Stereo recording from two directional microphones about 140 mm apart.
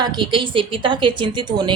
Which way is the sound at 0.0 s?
35° right (ahead or behind).